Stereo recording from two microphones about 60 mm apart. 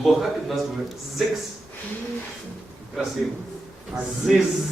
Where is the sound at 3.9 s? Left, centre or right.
Centre.